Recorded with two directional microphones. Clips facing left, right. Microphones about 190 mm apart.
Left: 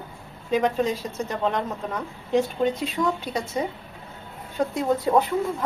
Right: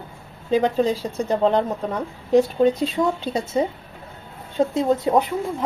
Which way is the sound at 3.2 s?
25° right (ahead or behind).